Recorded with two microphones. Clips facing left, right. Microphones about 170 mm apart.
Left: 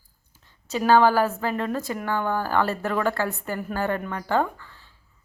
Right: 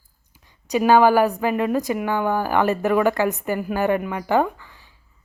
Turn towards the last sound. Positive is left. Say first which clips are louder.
# right 4 dB
turn(degrees=-15)  # may be behind; listen again after turning